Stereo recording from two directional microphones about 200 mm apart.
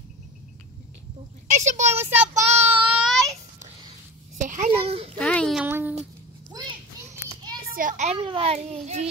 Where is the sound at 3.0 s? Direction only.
Centre (ahead or behind).